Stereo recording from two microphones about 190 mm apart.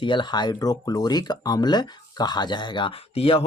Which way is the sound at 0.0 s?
25° left (ahead or behind).